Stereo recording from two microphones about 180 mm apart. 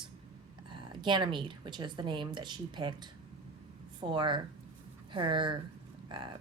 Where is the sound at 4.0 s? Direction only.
25° right (ahead or behind).